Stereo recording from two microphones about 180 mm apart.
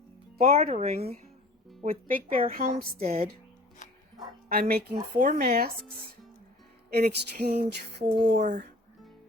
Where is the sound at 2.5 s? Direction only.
55° right (ahead or behind).